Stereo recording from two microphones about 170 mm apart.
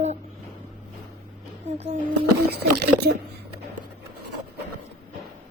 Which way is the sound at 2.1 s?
65° right (ahead or behind).